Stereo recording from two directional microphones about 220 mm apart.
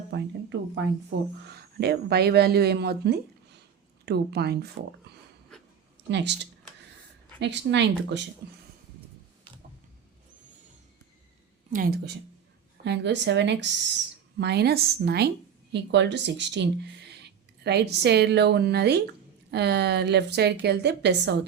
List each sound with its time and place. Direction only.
0.1 s a woman's voice: 50° right (ahead or behind)
6.1 s a woman's voice: 50° right (ahead or behind)
11.7 s a woman's voice: 40° right (ahead or behind)